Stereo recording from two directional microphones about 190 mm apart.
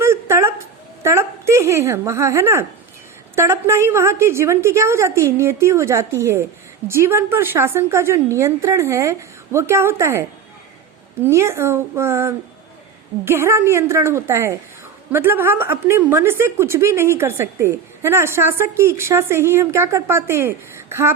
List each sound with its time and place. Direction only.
0.0 s a sound: 15° right (ahead or behind)
3.3 s a woman's voice: 15° right (ahead or behind)
11.3 s a woman's voice: 15° right (ahead or behind)